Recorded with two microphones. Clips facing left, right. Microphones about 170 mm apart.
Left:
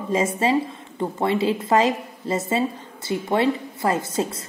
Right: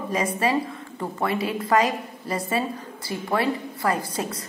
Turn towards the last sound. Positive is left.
turn(degrees=25)  # may be behind; listen again after turning